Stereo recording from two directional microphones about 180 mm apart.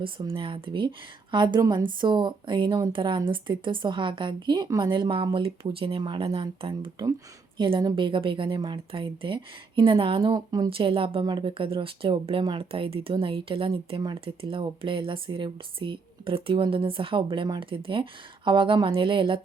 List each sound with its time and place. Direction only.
0.0 s speech: 30° right (ahead or behind)